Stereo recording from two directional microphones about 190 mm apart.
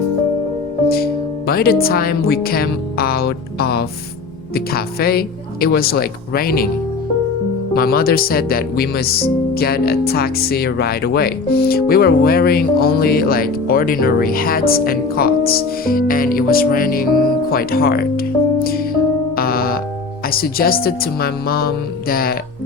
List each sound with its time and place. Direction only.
0.9 s speech: 55° left (ahead or behind)
7.7 s speech: 50° left (ahead or behind)
17.5 s music: 50° left (ahead or behind)
20.3 s speech: 50° left (ahead or behind)